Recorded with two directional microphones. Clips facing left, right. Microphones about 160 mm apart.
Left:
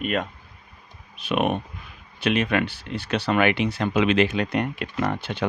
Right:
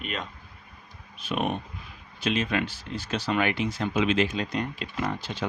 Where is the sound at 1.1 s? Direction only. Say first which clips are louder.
Left 5 dB; 70° left (ahead or behind).